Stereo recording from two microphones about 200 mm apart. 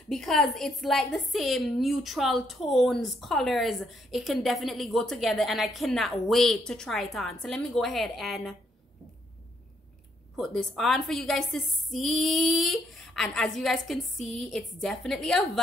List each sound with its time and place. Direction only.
0.1 s a woman's voice: centre (ahead or behind)
10.3 s a woman's voice: centre (ahead or behind)